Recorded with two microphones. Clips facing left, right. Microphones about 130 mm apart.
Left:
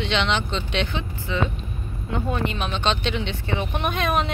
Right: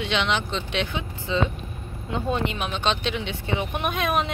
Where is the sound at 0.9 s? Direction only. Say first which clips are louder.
Right 1 dB; 20° right (ahead or behind).